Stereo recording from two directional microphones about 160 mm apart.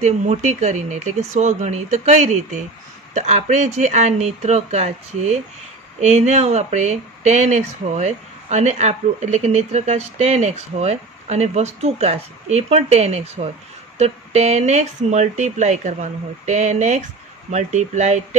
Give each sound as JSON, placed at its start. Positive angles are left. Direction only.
{"t": 0.0, "sound": "speech", "side_deg": -45}